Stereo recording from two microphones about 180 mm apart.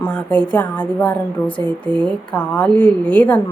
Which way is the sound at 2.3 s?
5° left (ahead or behind).